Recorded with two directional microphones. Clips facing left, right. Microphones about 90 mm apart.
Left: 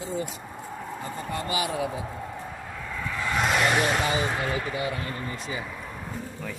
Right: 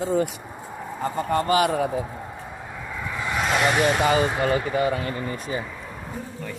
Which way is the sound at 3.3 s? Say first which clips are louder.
Right 2 dB; centre (ahead or behind).